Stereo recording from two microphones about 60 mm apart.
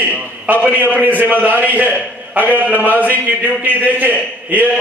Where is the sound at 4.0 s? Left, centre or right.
Right.